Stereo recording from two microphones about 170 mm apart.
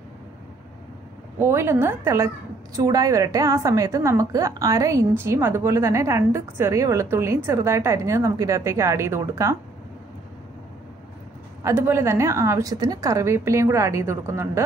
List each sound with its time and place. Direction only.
1.4 s a woman's voice: 15° right (ahead or behind)
11.6 s a woman's voice: 15° right (ahead or behind)